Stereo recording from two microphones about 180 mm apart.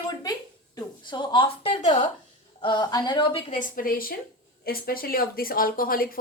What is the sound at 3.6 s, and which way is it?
A woman's voice, 50° left (ahead or behind).